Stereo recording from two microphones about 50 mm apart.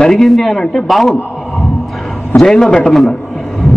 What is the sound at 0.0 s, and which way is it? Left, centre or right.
A man's voice, centre.